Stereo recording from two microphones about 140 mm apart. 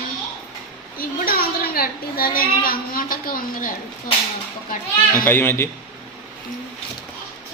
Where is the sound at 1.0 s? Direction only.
90° left.